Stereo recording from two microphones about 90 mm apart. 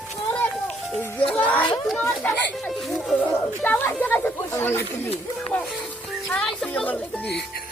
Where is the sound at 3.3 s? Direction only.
25° left (ahead or behind).